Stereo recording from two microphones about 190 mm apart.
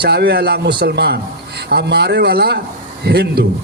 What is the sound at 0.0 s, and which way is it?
A man's voice, 55° right (ahead or behind).